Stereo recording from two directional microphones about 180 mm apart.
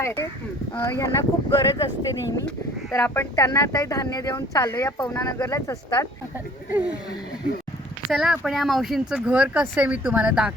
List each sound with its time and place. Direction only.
0.8 s speech: 15° left (ahead or behind)
8.1 s speech: centre (ahead or behind)